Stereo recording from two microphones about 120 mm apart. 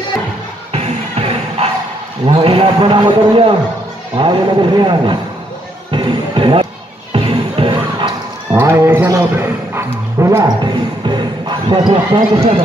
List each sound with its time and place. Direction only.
0.7 s music: 60° right (ahead or behind)
2.2 s a man's voice: 50° right (ahead or behind)
5.9 s music: 40° right (ahead or behind)
8.5 s music: 20° right (ahead or behind)
10.6 s basketball bounce: 40° right (ahead or behind)